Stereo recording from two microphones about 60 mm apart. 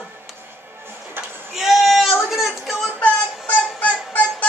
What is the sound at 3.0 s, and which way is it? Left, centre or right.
Music, left.